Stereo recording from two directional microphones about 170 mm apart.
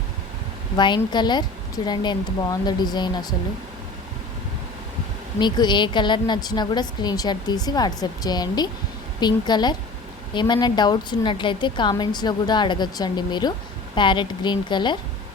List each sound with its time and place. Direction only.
0.8 s a woman's voice: 25° left (ahead or behind)
5.4 s a woman's voice: 25° left (ahead or behind)